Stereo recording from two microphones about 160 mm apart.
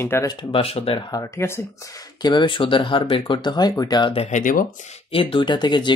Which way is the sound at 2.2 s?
30° left (ahead or behind).